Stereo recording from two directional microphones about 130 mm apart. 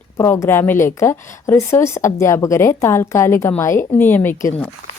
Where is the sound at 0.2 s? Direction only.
20° left (ahead or behind).